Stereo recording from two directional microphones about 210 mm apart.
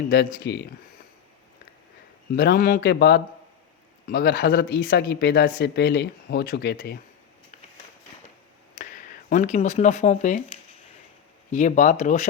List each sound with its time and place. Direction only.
0.4 s speech: 55° left (ahead or behind)
2.3 s speech: 50° left (ahead or behind)
8.8 s speech: 40° left (ahead or behind)